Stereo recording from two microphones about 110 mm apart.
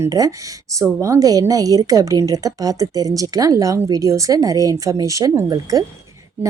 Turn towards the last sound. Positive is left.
turn(degrees=-30)  # may be behind; listen again after turning